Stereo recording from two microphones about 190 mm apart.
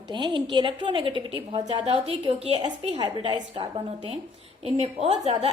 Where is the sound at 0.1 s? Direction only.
25° right (ahead or behind).